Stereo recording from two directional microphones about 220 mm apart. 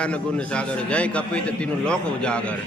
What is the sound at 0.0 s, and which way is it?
A man's voice, 5° left (ahead or behind).